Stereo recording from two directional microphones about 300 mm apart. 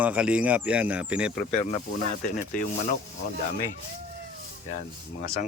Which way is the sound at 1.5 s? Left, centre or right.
Left.